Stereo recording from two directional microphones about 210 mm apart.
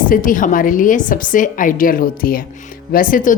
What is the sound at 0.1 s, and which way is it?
A woman's voice, 40° left (ahead or behind).